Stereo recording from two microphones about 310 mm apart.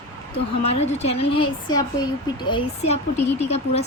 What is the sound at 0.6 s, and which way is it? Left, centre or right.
Speech, centre.